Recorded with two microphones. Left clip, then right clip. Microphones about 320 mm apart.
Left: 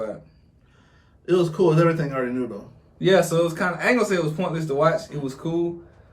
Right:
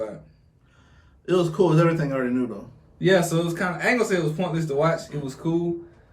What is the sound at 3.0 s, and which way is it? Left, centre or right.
Speech, centre.